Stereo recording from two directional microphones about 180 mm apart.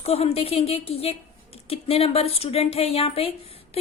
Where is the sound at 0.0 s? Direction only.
35° left (ahead or behind).